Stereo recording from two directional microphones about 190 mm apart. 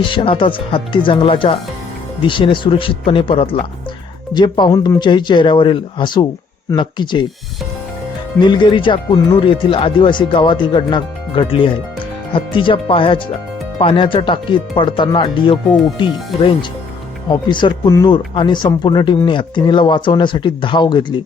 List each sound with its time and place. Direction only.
0.0 s speech: 25° left (ahead or behind)
8.4 s speech: 25° left (ahead or behind)